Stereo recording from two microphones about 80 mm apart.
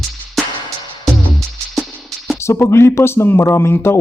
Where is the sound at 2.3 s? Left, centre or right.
Left.